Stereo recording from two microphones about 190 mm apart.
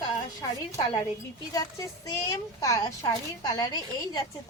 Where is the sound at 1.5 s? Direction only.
20° left (ahead or behind).